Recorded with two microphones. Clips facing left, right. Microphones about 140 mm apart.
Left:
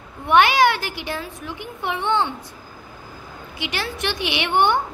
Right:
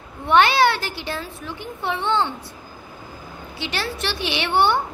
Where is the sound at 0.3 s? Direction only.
15° left (ahead or behind).